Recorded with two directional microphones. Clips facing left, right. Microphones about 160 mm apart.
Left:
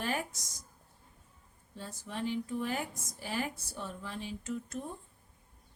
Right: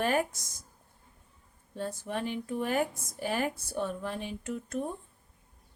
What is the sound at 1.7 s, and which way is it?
Speech, 55° right (ahead or behind).